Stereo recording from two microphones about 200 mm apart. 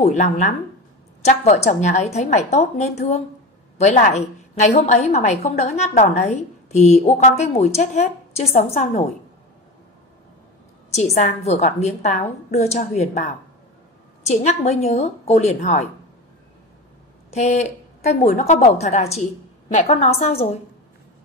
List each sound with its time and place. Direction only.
0.0 s a woman's voice: 35° left (ahead or behind)
11.0 s a woman's voice: 35° left (ahead or behind)
14.2 s a woman's voice: 35° left (ahead or behind)
17.3 s a woman's voice: 35° left (ahead or behind)